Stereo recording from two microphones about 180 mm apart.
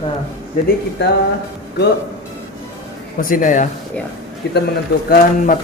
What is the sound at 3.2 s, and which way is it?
Speech, 50° left (ahead or behind).